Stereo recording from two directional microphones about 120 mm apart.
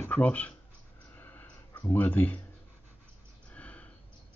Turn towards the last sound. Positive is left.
turn(degrees=10)  # may be behind; listen again after turning